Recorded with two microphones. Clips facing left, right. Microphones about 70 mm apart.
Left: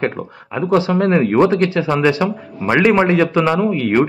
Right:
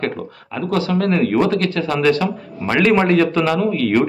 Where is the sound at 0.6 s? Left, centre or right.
Left.